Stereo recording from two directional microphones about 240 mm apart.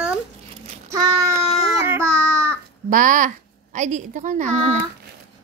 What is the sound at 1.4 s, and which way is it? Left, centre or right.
Baby cry, centre.